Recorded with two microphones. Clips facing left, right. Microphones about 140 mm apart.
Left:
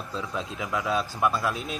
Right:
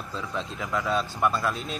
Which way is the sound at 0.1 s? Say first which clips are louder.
Even; 5° left (ahead or behind).